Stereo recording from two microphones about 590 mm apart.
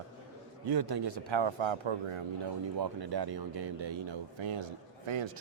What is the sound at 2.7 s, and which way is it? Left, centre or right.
Speech, right.